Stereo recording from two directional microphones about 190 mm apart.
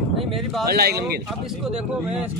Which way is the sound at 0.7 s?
55° right (ahead or behind).